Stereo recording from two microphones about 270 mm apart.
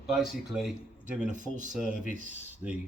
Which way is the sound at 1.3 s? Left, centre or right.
Right.